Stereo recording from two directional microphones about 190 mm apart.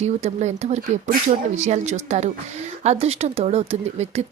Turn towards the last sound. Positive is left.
turn(degrees=-35)  # may be behind; listen again after turning